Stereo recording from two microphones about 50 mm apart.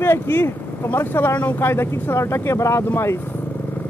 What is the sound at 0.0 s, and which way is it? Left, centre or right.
Speech, left.